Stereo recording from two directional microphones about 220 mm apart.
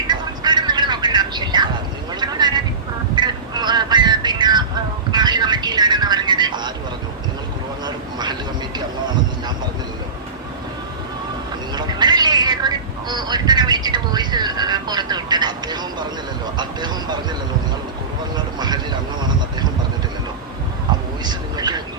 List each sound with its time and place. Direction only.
0.1 s music: 20° right (ahead or behind)
2.2 s a sound: 20° right (ahead or behind)
7.9 s vehicle: 20° right (ahead or behind)
11.7 s cat: 20° right (ahead or behind)
16.6 s vehicle: 20° right (ahead or behind)
18.3 s vehicle: 20° right (ahead or behind)
21.2 s a sound: 20° right (ahead or behind)